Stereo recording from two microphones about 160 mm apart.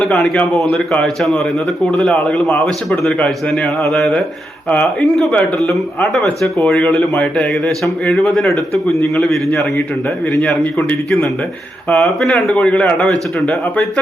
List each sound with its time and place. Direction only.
0.0 s a man's voice: 5° left (ahead or behind)
9.5 s a man's voice: 15° left (ahead or behind)
10.4 s a man's voice: 5° left (ahead or behind)